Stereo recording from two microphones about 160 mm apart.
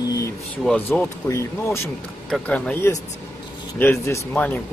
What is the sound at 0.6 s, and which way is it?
Speech, 5° left (ahead or behind).